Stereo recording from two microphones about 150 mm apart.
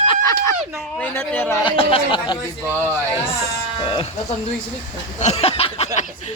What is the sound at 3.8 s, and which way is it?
Speech, 35° left (ahead or behind).